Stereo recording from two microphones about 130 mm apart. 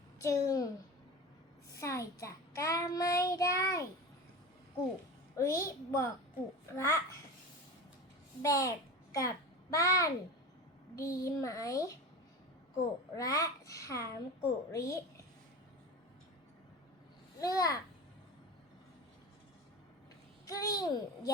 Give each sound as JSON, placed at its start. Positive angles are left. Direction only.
{"t": 0.2, "sound": "child singing", "side_deg": 25}
{"t": 1.8, "sound": "child singing", "side_deg": 25}
{"t": 5.4, "sound": "child singing", "side_deg": 20}
{"t": 8.4, "sound": "child singing", "side_deg": 25}
{"t": 9.1, "sound": "a child's voice", "side_deg": 25}
{"t": 10.9, "sound": "child singing", "side_deg": 25}
{"t": 13.1, "sound": "child singing", "side_deg": 25}
{"t": 17.4, "sound": "child singing", "side_deg": 25}
{"t": 20.5, "sound": "child singing", "side_deg": 30}